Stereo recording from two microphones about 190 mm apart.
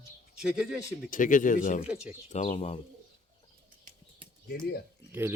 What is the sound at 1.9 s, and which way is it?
Speech, 5° right (ahead or behind).